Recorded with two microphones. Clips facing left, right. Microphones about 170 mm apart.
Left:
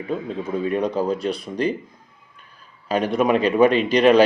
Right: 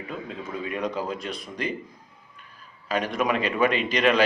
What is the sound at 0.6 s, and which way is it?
Speech, 35° left (ahead or behind).